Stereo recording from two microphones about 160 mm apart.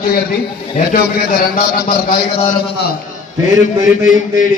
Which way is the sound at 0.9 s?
65° left (ahead or behind).